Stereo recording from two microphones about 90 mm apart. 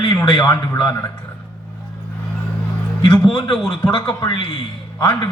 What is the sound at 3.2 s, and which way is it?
Speech, 75° left (ahead or behind).